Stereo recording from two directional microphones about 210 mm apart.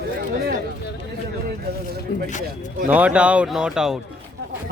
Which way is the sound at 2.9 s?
5° right (ahead or behind).